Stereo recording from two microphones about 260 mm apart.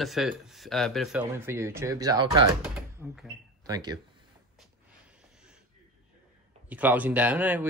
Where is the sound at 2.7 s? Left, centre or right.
Centre.